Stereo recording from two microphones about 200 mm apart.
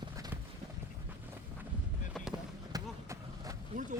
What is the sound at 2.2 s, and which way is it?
Fireworks, centre (ahead or behind).